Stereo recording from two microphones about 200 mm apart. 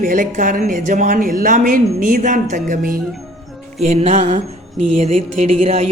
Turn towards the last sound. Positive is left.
turn(degrees=-30)  # may be behind; listen again after turning